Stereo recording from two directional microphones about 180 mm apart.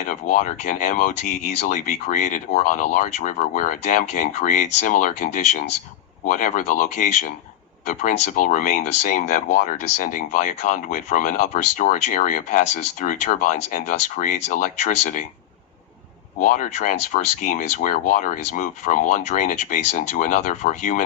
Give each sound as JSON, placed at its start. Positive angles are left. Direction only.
{"t": 0.0, "sound": "speech", "side_deg": 45}
{"t": 16.4, "sound": "speech", "side_deg": 45}